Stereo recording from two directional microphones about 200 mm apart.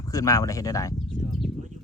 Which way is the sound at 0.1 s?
15° left (ahead or behind).